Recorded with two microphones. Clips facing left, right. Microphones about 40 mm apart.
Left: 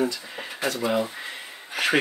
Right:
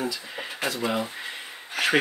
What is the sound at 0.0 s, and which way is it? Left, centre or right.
Speech, centre.